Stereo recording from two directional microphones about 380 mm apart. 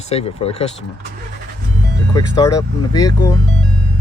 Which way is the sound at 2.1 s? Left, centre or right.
Centre.